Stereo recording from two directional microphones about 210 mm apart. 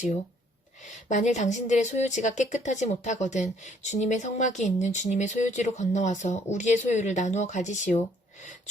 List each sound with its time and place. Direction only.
0.9 s speech: 35° left (ahead or behind)